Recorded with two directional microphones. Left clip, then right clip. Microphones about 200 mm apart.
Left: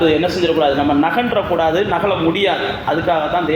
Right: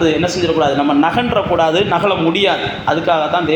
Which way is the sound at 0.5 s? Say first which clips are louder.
Right 3 dB; 30° right (ahead or behind).